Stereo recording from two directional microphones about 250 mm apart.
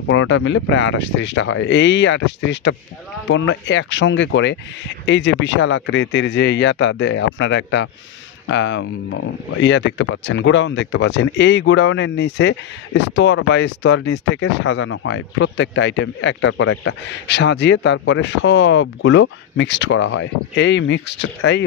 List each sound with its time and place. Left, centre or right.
0.1 s speech: left